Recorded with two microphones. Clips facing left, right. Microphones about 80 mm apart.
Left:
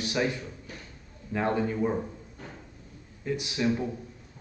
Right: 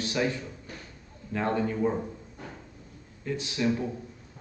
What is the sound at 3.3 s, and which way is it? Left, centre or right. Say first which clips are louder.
Speech: left 1 dB; centre.